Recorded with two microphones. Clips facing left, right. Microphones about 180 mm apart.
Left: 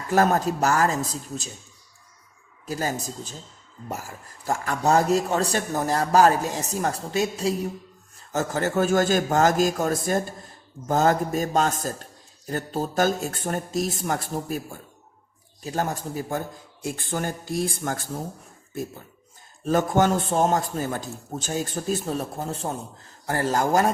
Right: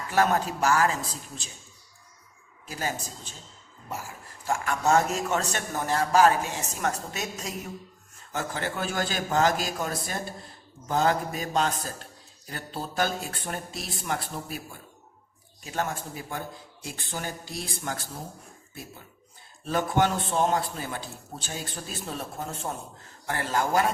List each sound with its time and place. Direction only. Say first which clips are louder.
0.1 s a man's voice: left 4 dB; 40° left (ahead or behind)
2.6 s a man's voice: left 5 dB; 40° left (ahead or behind)
4.4 s a man's voice: left 2 dB; 35° left (ahead or behind)
8.3 s a man's voice: left 7 dB; 40° left (ahead or behind)
19.6 s a man's voice: left 4 dB; 45° left (ahead or behind)